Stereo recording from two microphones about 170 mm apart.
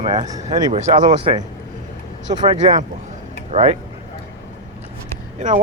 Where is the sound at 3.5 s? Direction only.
35° right (ahead or behind).